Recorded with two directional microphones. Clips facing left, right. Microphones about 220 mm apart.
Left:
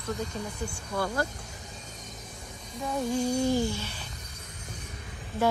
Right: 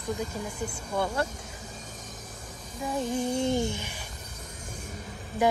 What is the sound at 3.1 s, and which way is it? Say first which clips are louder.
Speech: left 2 dB; 20° right (ahead or behind).